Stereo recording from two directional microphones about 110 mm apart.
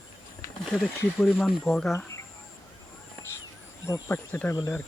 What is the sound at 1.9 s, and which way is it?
Speech, 25° left (ahead or behind).